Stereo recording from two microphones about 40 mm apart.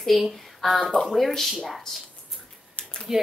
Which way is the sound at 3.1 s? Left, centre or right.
Centre.